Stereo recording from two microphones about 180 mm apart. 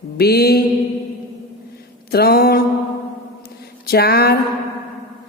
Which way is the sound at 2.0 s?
60° left (ahead or behind).